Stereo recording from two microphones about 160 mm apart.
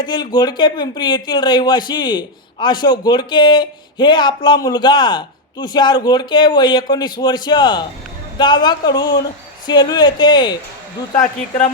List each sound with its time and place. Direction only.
0.0 s speech: 25° left (ahead or behind)